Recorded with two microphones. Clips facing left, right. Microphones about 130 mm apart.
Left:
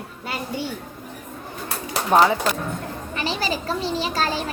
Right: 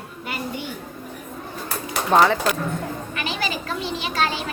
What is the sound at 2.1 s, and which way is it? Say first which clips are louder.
Speech: even; 10° left (ahead or behind).